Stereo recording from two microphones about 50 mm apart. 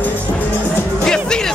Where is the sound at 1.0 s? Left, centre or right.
Centre.